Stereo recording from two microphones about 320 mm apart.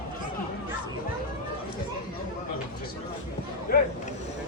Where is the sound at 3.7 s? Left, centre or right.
Left.